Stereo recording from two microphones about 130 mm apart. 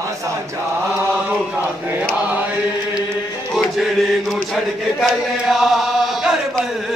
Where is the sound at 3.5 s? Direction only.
Centre (ahead or behind).